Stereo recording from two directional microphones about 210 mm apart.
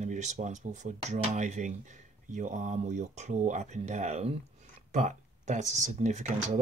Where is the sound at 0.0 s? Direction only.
35° right (ahead or behind).